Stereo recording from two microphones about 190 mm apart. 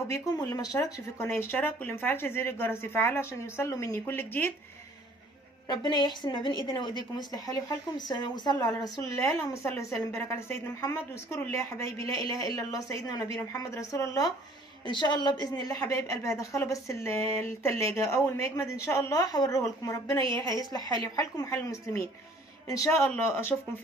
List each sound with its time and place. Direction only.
0.1 s speech: 15° left (ahead or behind)
5.7 s a woman's voice: 25° left (ahead or behind)